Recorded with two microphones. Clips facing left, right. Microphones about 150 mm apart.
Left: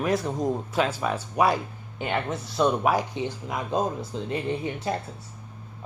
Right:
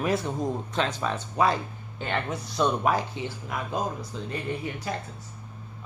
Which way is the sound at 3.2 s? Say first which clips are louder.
Left 3 dB; 20° left (ahead or behind).